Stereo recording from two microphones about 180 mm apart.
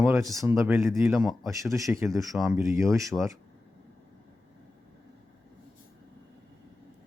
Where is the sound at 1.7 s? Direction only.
15° right (ahead or behind).